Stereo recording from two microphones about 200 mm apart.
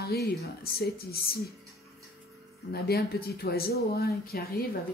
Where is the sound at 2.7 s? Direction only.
50° left (ahead or behind).